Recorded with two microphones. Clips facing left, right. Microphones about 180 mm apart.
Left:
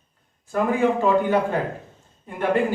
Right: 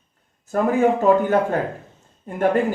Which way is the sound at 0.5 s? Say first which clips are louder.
Right 3 dB; 45° right (ahead or behind).